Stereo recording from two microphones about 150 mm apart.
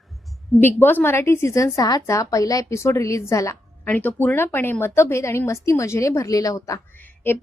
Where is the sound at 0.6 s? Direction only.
15° left (ahead or behind).